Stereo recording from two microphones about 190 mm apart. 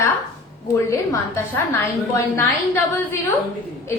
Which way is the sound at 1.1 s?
10° left (ahead or behind).